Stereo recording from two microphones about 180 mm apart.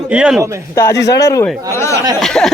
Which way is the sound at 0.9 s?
70° left (ahead or behind).